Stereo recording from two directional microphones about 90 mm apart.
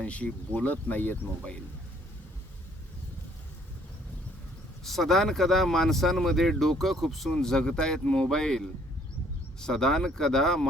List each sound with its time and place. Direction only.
0.0 s speech: 15° left (ahead or behind)
4.9 s speech: 5° left (ahead or behind)